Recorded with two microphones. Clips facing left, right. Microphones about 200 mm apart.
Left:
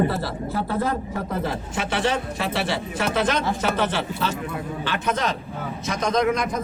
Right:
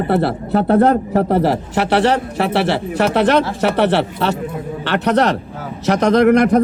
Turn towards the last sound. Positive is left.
turn(degrees=-70)  # may be behind; listen again after turning